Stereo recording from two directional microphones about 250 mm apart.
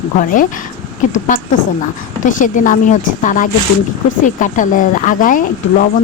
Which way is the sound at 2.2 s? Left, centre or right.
Left.